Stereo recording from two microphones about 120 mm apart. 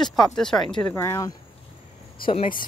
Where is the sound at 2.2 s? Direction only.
45° left (ahead or behind).